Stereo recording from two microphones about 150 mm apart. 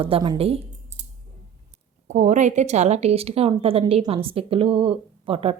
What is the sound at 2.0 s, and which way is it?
Speech, 55° right (ahead or behind).